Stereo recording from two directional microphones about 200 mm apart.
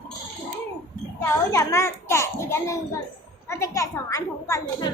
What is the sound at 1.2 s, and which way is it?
A woman's voice, 15° left (ahead or behind).